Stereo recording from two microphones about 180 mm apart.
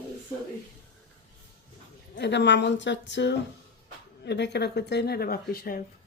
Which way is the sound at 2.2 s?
75° left (ahead or behind).